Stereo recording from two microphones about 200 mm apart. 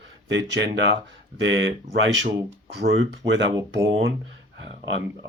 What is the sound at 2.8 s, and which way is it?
Speech, 60° right (ahead or behind).